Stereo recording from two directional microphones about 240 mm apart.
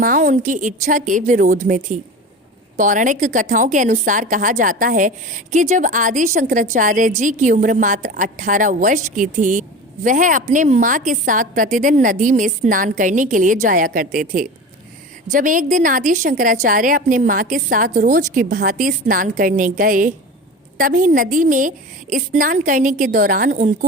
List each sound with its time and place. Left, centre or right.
0.0 s a woman's voice: right